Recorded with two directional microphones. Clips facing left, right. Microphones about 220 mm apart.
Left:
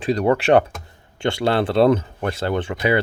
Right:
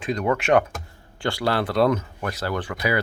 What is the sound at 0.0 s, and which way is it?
Speech, 35° left (ahead or behind).